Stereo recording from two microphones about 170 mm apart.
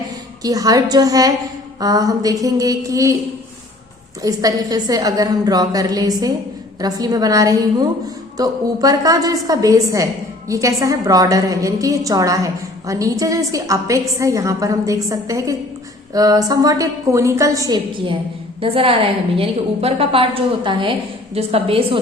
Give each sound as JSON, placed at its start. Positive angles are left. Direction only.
{"t": 0.4, "sound": "a woman's voice", "side_deg": -20}
{"t": 4.2, "sound": "a woman's voice", "side_deg": -20}